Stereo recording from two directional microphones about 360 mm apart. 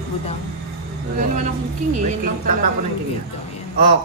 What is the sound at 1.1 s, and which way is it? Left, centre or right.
A woman's voice, centre.